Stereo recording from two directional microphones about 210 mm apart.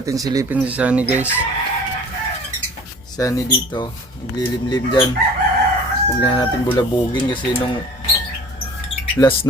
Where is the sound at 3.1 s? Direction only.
15° left (ahead or behind).